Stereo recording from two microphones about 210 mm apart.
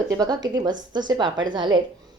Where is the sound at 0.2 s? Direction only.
20° right (ahead or behind).